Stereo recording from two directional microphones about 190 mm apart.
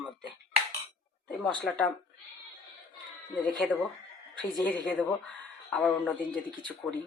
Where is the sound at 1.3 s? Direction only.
5° left (ahead or behind).